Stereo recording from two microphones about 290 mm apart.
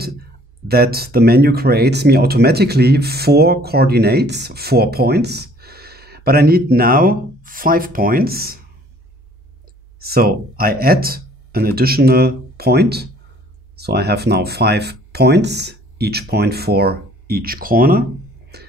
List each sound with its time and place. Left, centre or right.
0.7 s speech: right
9.9 s speech: right
18.5 s music: right